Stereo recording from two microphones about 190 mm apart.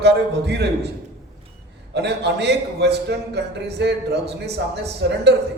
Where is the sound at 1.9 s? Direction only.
60° right (ahead or behind).